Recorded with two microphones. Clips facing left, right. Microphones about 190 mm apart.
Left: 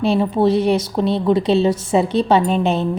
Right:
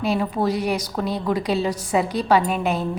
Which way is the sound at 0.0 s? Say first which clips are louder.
Left 6 dB; 25° left (ahead or behind).